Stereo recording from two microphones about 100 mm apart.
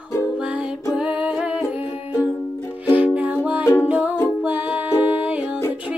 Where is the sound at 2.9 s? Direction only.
15° right (ahead or behind).